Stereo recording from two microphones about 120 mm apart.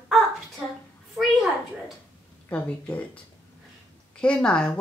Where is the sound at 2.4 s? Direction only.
15° left (ahead or behind).